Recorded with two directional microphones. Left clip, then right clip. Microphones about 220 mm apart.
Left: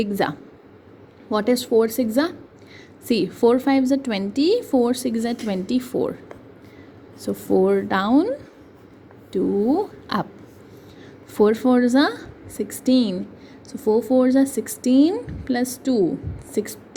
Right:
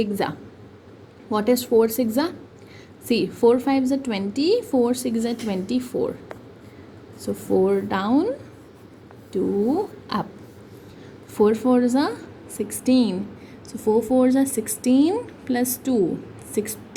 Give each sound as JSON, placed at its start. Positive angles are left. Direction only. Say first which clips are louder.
{"t": 0.0, "sound": "a woman's voice", "louder": "left 2 dB", "side_deg": 25}
{"t": 7.2, "sound": "a woman's voice", "louder": "left 1 dB", "side_deg": 25}
{"t": 9.3, "sound": "speech", "louder": "left 2 dB", "side_deg": 25}
{"t": 11.3, "sound": "a woman's voice", "louder": "left 1 dB", "side_deg": 20}